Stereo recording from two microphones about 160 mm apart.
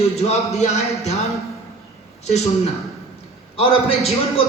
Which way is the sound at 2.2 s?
45° left (ahead or behind).